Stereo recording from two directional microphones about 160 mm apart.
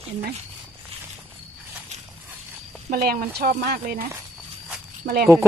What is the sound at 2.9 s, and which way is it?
Speech, 65° right (ahead or behind).